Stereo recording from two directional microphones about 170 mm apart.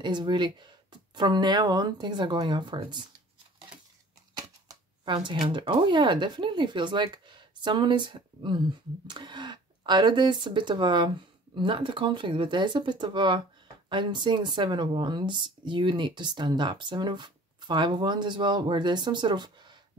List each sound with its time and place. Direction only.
0.0 s speech: 25° right (ahead or behind)
4.4 s shuffling cards: 25° right (ahead or behind)
5.5 s speech: 30° right (ahead or behind)